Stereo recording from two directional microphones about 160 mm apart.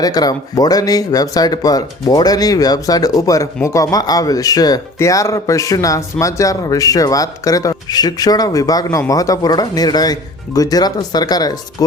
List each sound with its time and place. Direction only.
0.0 s speech: 25° left (ahead or behind)